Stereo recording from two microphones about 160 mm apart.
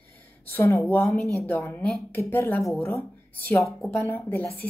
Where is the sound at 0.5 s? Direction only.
15° left (ahead or behind).